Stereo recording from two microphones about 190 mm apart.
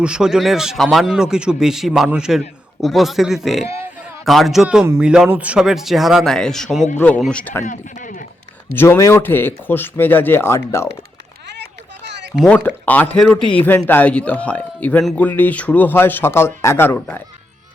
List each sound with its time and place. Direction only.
0.0 s a man's voice: 5° right (ahead or behind)
7.6 s speech: 45° left (ahead or behind)
8.7 s a man's voice: 10° left (ahead or behind)
11.5 s a sound: 65° right (ahead or behind)
12.4 s a man's voice: 5° left (ahead or behind)